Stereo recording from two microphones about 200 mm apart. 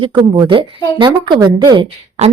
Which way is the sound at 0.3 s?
25° right (ahead or behind).